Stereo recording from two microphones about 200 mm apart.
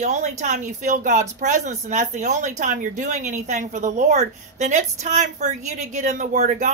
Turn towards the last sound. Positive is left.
turn(degrees=-35)  # may be behind; listen again after turning